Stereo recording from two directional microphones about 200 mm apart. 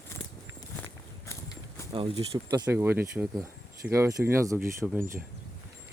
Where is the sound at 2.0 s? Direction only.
25° right (ahead or behind).